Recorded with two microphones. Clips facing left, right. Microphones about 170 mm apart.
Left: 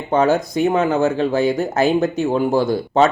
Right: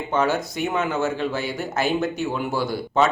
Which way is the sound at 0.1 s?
35° left (ahead or behind).